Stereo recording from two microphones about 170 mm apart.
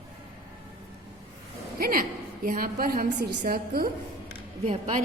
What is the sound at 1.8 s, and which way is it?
A woman's voice, 60° right (ahead or behind).